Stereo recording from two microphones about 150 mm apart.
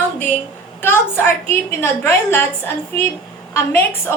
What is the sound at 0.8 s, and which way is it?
A woman's voice, 15° left (ahead or behind).